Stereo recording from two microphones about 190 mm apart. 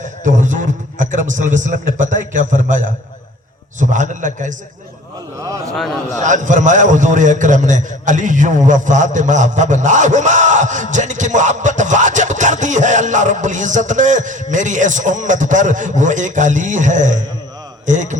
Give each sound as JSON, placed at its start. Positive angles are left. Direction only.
{"t": 0.0, "sound": "music", "side_deg": -40}
{"t": 5.4, "sound": "a man's voice", "side_deg": -15}
{"t": 5.7, "sound": "a man's voice", "side_deg": 0}
{"t": 6.2, "sound": "music", "side_deg": -40}